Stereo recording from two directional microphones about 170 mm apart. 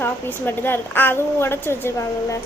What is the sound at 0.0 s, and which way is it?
A woman's voice, 10° left (ahead or behind).